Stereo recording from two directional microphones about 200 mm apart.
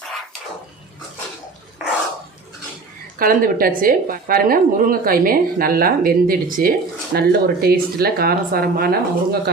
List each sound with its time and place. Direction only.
3.2 s a woman's voice: 45° right (ahead or behind)